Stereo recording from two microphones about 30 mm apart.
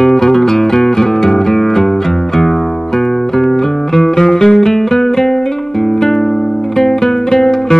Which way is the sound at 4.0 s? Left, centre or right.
Centre.